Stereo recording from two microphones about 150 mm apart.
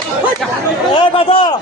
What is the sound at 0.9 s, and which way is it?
Speech, 35° left (ahead or behind).